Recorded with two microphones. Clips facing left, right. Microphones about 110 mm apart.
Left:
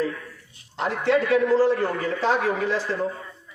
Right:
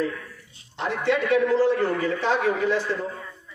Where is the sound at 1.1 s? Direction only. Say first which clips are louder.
Left 2 dB; 35° left (ahead or behind).